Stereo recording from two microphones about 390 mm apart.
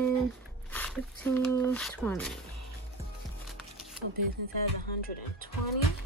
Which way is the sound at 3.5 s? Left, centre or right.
Centre.